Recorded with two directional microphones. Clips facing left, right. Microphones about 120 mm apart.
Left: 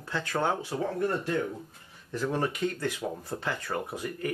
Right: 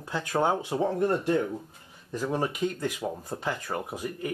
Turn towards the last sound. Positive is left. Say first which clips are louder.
# even
turn(degrees=-15)  # may be behind; listen again after turning